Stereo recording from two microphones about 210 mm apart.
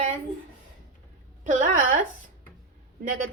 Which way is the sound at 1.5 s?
35° right (ahead or behind).